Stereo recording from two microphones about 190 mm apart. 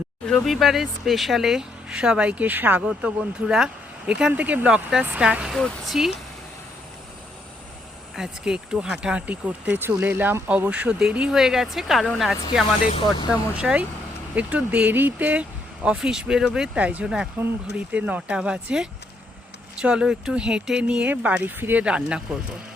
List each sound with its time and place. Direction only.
0.3 s speech: centre (ahead or behind)
8.1 s speech: 5° right (ahead or behind)
12.9 s speech: 25° left (ahead or behind)
13.3 s speech: 5° right (ahead or behind)